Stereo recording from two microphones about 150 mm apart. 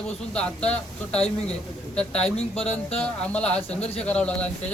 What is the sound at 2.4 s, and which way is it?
Speech, 45° left (ahead or behind).